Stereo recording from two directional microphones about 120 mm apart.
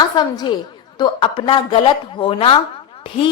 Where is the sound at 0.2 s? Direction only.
35° left (ahead or behind).